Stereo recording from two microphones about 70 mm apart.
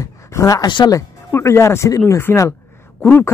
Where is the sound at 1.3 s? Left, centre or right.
Left.